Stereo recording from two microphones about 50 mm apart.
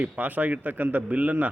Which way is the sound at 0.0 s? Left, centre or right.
Right.